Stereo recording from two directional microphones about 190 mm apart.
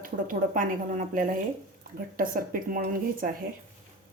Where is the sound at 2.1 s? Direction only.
50° right (ahead or behind).